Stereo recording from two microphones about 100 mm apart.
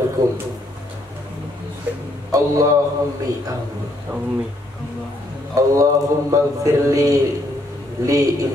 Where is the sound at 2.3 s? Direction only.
35° right (ahead or behind).